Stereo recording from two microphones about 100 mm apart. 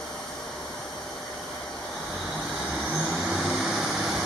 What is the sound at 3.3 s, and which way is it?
Vehicle, 5° right (ahead or behind).